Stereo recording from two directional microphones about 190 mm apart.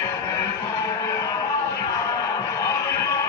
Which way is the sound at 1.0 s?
15° left (ahead or behind).